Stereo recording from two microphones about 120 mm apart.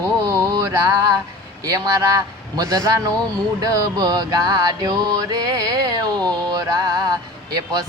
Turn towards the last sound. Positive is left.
turn(degrees=-35)  # may be behind; listen again after turning